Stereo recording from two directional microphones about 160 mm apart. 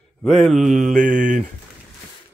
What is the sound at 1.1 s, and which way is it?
Speech, 50° right (ahead or behind).